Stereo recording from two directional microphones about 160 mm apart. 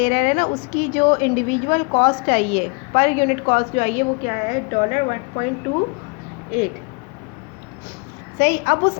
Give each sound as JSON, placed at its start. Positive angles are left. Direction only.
{"t": 0.0, "sound": "a woman's voice", "side_deg": 50}
{"t": 8.4, "sound": "a woman's voice", "side_deg": 75}